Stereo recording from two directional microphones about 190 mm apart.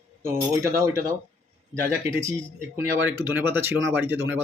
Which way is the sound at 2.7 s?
15° right (ahead or behind).